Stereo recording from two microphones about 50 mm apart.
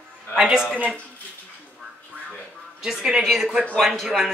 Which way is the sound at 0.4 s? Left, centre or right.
Centre.